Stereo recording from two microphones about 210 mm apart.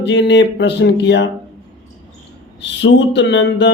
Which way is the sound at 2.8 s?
60° left (ahead or behind).